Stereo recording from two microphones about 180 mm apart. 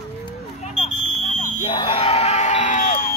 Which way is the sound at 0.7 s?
40° left (ahead or behind).